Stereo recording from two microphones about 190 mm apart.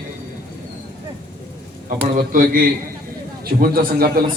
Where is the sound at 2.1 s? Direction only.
45° right (ahead or behind).